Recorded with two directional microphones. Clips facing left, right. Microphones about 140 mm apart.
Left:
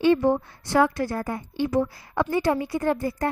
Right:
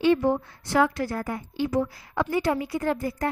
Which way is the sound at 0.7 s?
30° left (ahead or behind).